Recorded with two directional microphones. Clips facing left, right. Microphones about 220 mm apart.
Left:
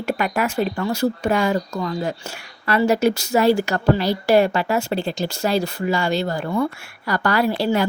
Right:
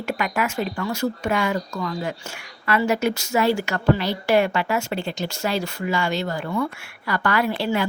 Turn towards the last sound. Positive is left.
turn(degrees=40)  # may be behind; listen again after turning